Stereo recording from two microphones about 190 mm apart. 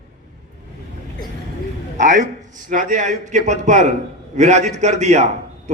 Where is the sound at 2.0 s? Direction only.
40° right (ahead or behind).